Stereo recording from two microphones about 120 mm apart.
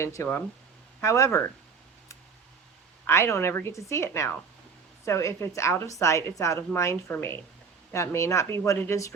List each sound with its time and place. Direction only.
0.0 s a woman's voice: 25° left (ahead or behind)
3.1 s a woman's voice: 20° left (ahead or behind)